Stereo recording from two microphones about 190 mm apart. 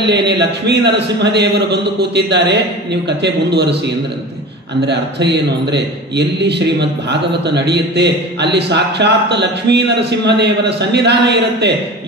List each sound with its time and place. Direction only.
0.0 s a man's voice: 65° right (ahead or behind)
5.7 s a man's voice: 60° right (ahead or behind)